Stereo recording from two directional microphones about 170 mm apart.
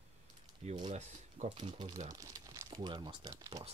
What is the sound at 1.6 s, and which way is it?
Speech, 30° right (ahead or behind).